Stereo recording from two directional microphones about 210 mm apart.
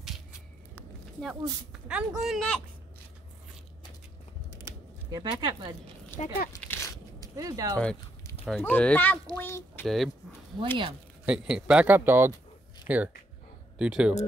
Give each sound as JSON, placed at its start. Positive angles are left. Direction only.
{"t": 1.7, "sound": "speech", "side_deg": -5}
{"t": 4.5, "sound": "a sound", "side_deg": -15}
{"t": 6.2, "sound": "speech", "side_deg": 30}
{"t": 6.5, "sound": "a sound", "side_deg": 15}
{"t": 7.3, "sound": "speech", "side_deg": -15}
{"t": 7.7, "sound": "speech", "side_deg": 5}
{"t": 9.8, "sound": "speech", "side_deg": 0}
{"t": 11.2, "sound": "speech", "side_deg": -5}